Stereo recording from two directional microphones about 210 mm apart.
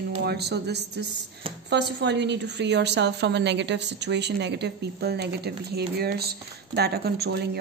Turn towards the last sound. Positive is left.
turn(degrees=-50)  # may be behind; listen again after turning